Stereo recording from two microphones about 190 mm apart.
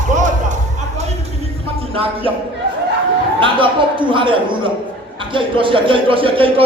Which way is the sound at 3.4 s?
25° right (ahead or behind).